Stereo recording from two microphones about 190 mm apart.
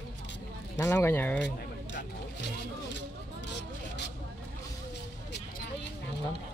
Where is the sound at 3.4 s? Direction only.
65° left (ahead or behind).